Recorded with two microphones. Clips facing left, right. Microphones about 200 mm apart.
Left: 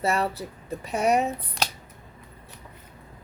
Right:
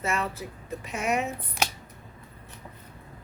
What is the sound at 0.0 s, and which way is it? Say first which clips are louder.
Speech: left 4 dB; 35° left (ahead or behind).